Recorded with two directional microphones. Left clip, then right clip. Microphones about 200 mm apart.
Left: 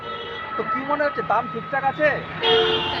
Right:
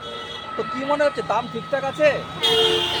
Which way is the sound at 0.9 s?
50° right (ahead or behind).